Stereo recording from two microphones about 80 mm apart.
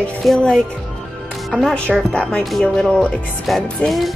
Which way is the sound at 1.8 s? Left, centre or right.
Centre.